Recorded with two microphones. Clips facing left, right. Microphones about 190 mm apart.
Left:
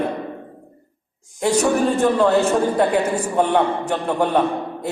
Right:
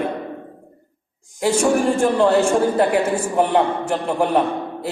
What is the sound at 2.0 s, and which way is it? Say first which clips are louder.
A man's voice: even; 10° right (ahead or behind).